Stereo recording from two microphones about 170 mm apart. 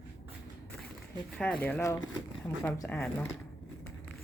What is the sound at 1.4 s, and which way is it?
Speech, 10° left (ahead or behind).